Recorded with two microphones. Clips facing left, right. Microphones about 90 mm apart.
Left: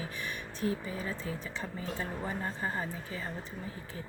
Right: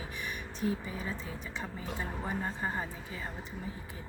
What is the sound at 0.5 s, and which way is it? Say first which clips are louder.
Speech: left 1 dB; 20° right (ahead or behind).